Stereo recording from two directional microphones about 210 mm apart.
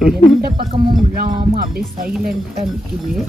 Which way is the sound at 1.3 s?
25° right (ahead or behind).